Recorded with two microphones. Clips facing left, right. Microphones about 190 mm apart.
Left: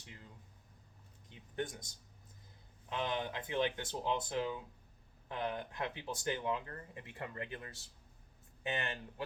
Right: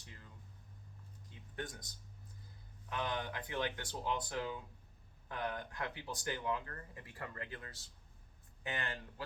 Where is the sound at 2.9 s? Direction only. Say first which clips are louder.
Left 2 dB; 20° left (ahead or behind).